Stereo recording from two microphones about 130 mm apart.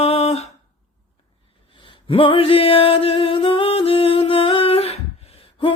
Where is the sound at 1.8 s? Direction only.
40° left (ahead or behind).